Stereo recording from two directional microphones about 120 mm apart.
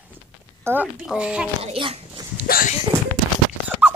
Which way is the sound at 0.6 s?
15° right (ahead or behind).